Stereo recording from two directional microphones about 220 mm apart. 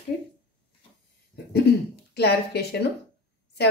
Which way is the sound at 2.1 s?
45° left (ahead or behind).